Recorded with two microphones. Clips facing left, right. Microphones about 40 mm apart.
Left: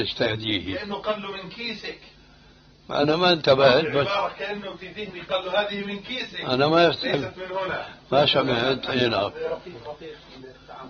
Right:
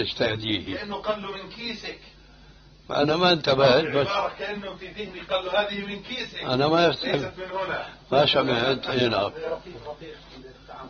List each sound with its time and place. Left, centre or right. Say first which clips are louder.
0.0 s a man's voice: left 1 dB; centre
2.9 s a man's voice: left 1 dB; centre
6.5 s a man's voice: left 2 dB; left
6.9 s a man's voice: left 1 dB; centre